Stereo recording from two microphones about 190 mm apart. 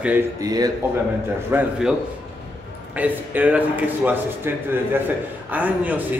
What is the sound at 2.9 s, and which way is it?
A man's voice, 10° right (ahead or behind).